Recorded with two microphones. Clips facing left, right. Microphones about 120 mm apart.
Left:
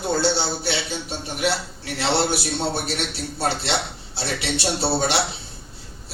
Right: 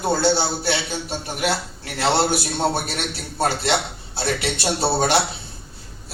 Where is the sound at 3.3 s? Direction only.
50° right (ahead or behind).